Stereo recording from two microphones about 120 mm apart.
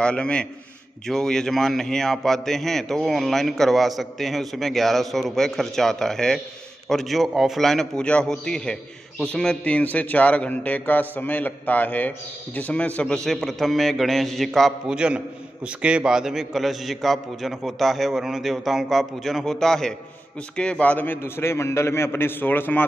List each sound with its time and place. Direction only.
0.0 s a man's voice: 10° left (ahead or behind)